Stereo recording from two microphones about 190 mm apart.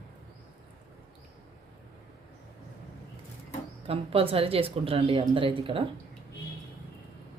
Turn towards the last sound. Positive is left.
turn(degrees=-30)  # may be behind; listen again after turning